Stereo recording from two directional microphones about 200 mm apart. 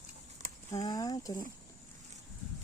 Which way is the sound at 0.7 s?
20° left (ahead or behind).